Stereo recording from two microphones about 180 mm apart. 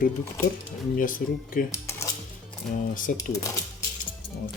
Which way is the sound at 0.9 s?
50° left (ahead or behind).